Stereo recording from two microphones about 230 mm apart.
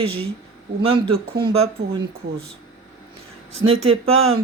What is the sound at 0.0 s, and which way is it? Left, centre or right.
Speech, right.